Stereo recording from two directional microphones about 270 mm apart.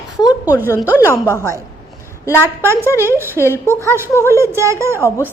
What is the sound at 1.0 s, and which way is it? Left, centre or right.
Speech, centre.